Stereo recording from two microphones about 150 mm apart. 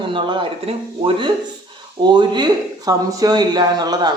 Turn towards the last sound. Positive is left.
turn(degrees=-25)  # may be behind; listen again after turning